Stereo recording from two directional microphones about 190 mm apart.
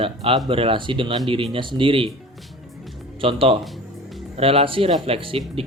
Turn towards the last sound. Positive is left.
turn(degrees=-30)  # may be behind; listen again after turning